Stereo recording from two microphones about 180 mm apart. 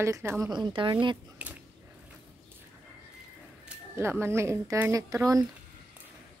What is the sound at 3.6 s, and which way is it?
Speech, 15° right (ahead or behind).